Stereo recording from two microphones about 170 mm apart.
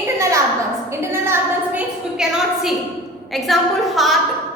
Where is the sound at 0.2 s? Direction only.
15° right (ahead or behind).